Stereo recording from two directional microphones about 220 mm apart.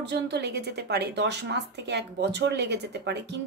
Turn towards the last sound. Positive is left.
turn(degrees=-50)  # may be behind; listen again after turning